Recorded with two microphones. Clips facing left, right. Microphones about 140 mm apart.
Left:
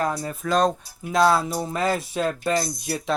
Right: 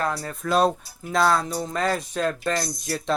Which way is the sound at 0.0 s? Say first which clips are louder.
Left 2 dB; 15° left (ahead or behind).